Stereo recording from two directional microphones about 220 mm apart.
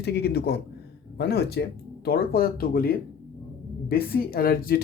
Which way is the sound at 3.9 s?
40° left (ahead or behind).